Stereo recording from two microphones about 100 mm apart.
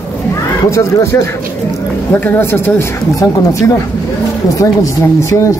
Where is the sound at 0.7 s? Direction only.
30° left (ahead or behind).